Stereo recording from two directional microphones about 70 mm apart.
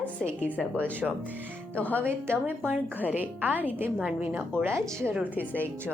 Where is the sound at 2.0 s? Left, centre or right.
Right.